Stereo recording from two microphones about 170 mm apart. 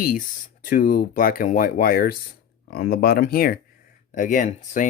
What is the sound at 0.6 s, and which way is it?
Speech, 50° left (ahead or behind).